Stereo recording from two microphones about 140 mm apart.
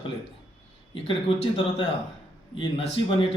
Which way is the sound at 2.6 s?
40° left (ahead or behind).